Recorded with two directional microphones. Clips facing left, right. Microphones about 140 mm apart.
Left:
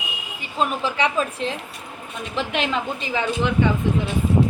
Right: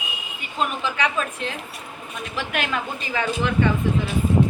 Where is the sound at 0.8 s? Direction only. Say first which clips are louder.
Left 2 dB; 30° left (ahead or behind).